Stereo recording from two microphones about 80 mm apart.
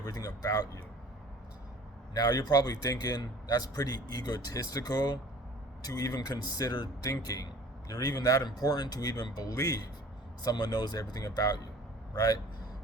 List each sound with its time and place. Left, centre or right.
0.0 s a man's voice: left
2.1 s speech: left